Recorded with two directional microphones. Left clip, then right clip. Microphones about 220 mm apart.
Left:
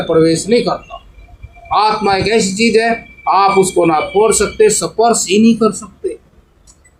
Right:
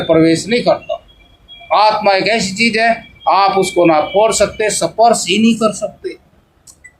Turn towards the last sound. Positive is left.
turn(degrees=-35)  # may be behind; listen again after turning